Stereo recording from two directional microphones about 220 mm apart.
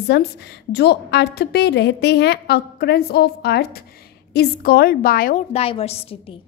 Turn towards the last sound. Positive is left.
turn(degrees=25)  # may be behind; listen again after turning